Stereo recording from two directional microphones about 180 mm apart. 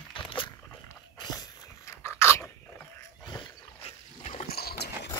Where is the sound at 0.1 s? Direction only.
30° left (ahead or behind).